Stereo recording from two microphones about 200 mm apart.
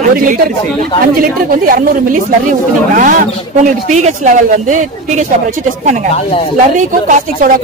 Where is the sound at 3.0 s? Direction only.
40° right (ahead or behind).